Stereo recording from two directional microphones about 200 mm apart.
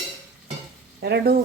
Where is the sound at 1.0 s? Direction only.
55° right (ahead or behind).